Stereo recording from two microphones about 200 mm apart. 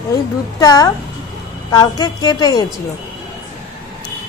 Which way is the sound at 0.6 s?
20° left (ahead or behind).